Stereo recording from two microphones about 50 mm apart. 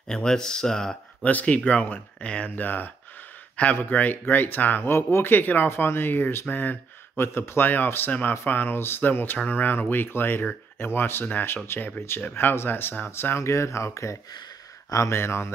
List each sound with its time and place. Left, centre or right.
0.1 s speech: centre
1.2 s speech: left
4.9 s speech: left
12.2 s speech: left
13.4 s speech: left
15.1 s speech: left